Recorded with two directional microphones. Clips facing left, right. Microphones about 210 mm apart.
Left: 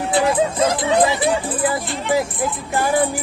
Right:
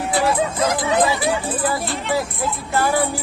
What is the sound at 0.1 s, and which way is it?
Speech, 25° left (ahead or behind).